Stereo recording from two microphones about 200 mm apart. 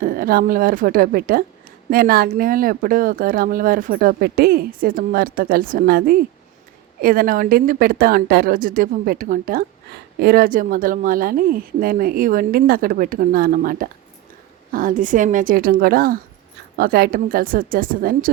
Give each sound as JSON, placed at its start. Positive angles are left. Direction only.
{"t": 0.0, "sound": "speech", "side_deg": -45}